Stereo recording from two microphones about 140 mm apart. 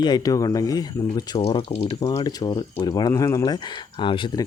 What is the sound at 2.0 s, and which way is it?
Speech, 30° left (ahead or behind).